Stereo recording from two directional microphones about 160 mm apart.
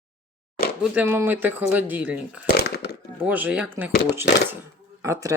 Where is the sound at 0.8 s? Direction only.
10° right (ahead or behind).